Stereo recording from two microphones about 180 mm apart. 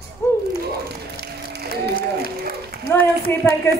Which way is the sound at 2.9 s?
15° left (ahead or behind).